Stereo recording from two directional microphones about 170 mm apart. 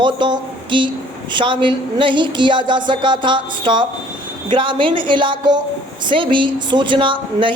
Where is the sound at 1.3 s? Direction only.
30° right (ahead or behind).